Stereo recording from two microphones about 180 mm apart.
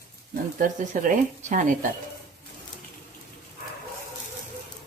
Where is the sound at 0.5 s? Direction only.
45° right (ahead or behind).